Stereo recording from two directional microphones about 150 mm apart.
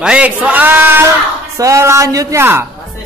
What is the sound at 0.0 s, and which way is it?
A man's voice, 10° right (ahead or behind).